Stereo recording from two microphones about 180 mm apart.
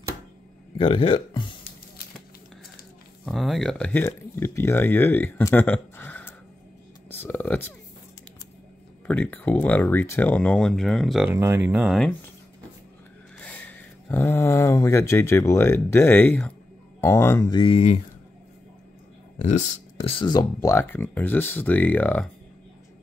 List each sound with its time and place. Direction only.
0.7 s speech: 30° left (ahead or behind)
3.3 s speech: centre (ahead or behind)
9.0 s speech: 10° left (ahead or behind)
11.2 s speech: 15° right (ahead or behind)
14.0 s speech: 15° left (ahead or behind); by 18.0 s 35° left (ahead or behind)
19.4 s speech: 40° left (ahead or behind); by 20.7 s 20° left (ahead or behind)
20.7 s speech: 10° left (ahead or behind)